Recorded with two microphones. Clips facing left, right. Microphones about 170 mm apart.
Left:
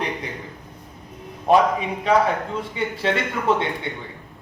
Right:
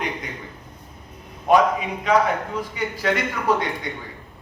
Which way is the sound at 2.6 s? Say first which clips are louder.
Left 1 dB; 25° left (ahead or behind).